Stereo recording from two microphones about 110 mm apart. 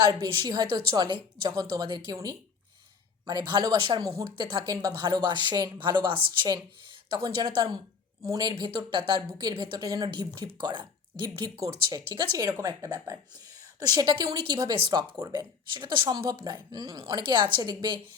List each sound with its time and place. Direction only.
0.0 s speech: 40° right (ahead or behind)
3.2 s speech: 40° right (ahead or behind)
7.3 s speech: 35° right (ahead or behind)
8.5 s speech: 45° right (ahead or behind)
10.1 s speech: 45° right (ahead or behind)